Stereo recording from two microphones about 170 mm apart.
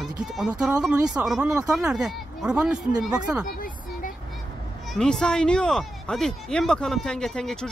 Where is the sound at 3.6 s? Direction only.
55° left (ahead or behind).